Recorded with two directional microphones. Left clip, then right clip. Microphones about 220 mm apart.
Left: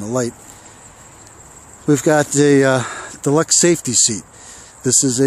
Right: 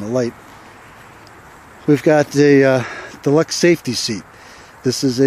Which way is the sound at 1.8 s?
Centre (ahead or behind).